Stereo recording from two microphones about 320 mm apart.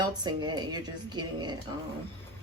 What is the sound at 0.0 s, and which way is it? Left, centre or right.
Speech, centre.